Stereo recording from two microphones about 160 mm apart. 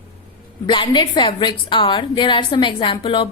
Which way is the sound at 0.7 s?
30° left (ahead or behind).